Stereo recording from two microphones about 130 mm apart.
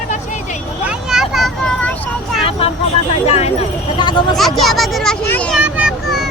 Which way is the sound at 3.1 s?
50° left (ahead or behind).